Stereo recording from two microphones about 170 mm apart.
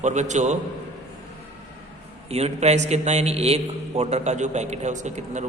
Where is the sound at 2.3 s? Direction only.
40° right (ahead or behind).